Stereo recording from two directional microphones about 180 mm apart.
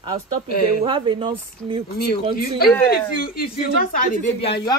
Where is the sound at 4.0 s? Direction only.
50° left (ahead or behind).